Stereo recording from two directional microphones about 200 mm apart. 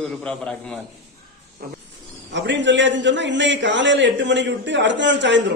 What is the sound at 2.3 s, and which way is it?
A man's voice, 60° right (ahead or behind).